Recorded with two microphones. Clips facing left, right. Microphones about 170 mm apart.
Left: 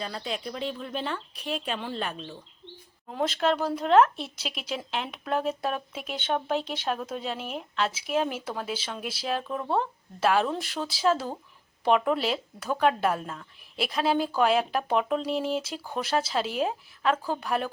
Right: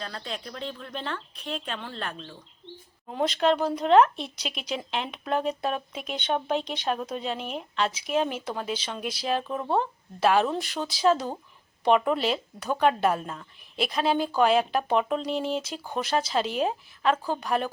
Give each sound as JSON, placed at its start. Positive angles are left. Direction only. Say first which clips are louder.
{"t": 0.0, "sound": "speech", "louder": "left 3 dB", "side_deg": 10}